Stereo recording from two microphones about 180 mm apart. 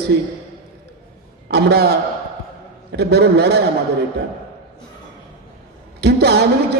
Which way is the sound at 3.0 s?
65° right (ahead or behind).